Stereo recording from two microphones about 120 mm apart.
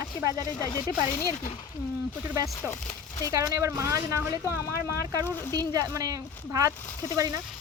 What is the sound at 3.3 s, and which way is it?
Speech, 25° right (ahead or behind).